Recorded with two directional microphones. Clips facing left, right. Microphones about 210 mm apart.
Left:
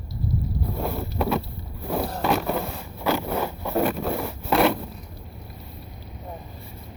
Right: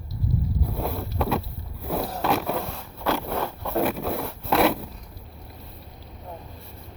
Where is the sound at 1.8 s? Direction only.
5° right (ahead or behind).